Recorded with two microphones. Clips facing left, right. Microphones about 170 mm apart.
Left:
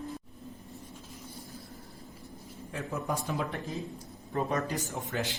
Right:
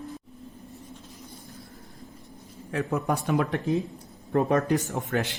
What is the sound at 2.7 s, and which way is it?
Speech, 70° right (ahead or behind).